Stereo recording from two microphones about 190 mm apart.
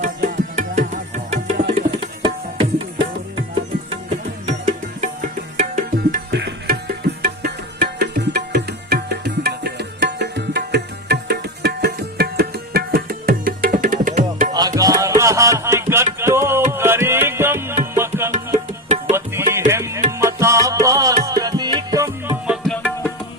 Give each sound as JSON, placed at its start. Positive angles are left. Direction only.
{"t": 0.0, "sound": "tabla", "side_deg": -40}
{"t": 2.2, "sound": "tabla", "side_deg": -25}
{"t": 4.4, "sound": "music", "side_deg": -35}
{"t": 6.3, "sound": "music", "side_deg": -60}
{"t": 14.5, "sound": "music", "side_deg": -20}
{"t": 18.3, "sound": "music", "side_deg": -35}
{"t": 19.1, "sound": "music", "side_deg": -15}
{"t": 22.4, "sound": "music", "side_deg": 0}